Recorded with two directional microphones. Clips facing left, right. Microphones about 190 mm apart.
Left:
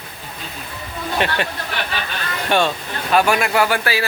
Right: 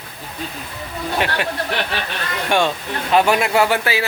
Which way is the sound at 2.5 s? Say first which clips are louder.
Even; 15° right (ahead or behind).